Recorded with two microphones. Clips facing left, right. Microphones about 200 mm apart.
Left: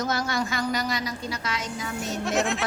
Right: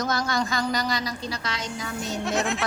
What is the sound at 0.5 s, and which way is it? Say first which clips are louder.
A woman's voice: right 1 dB; 35° right (ahead or behind).